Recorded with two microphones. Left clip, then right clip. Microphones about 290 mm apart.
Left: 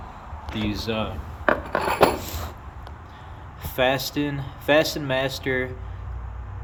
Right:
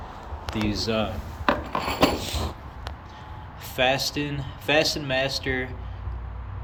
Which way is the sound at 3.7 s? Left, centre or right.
Centre.